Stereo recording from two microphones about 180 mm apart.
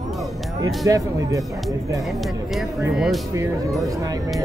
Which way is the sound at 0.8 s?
20° right (ahead or behind).